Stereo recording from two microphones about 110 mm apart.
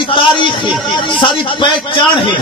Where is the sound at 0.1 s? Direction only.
50° left (ahead or behind).